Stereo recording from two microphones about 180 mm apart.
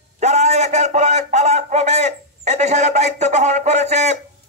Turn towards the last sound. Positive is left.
turn(degrees=-40)  # may be behind; listen again after turning